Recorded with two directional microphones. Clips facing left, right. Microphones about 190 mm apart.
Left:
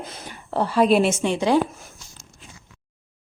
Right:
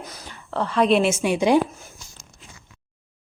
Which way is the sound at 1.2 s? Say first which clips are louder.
Right 1 dB; 15° right (ahead or behind).